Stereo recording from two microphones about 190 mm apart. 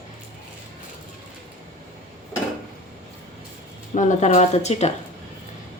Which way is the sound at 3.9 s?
40° left (ahead or behind).